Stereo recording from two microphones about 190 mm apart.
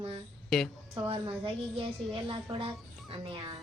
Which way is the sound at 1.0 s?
30° right (ahead or behind).